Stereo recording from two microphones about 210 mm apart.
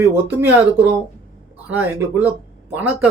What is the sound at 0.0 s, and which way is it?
Speech, 10° right (ahead or behind).